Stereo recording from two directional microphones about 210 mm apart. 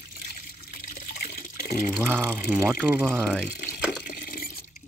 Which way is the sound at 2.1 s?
10° right (ahead or behind).